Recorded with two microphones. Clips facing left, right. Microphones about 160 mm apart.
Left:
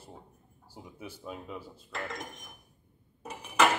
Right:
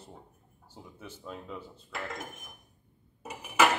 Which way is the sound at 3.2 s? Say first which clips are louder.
Even; 5° right (ahead or behind).